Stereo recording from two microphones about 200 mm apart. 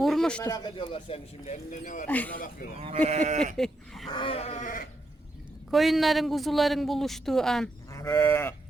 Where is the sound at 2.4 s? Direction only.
45° left (ahead or behind).